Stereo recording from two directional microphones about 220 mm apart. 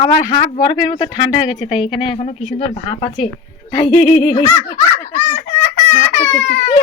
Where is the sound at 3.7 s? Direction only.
15° left (ahead or behind).